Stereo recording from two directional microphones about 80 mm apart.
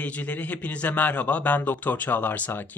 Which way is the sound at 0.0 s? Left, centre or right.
Centre.